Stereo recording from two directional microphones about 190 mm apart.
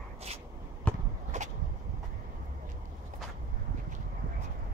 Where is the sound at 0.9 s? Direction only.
5° left (ahead or behind).